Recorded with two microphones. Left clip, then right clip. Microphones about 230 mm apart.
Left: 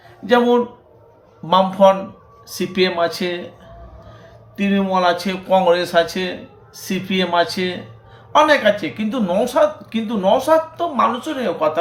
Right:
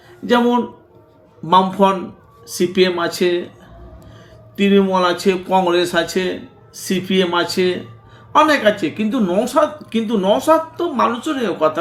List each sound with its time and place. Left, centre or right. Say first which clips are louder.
0.3 s speech: left 1 dB; centre
4.5 s speech: right 4 dB; centre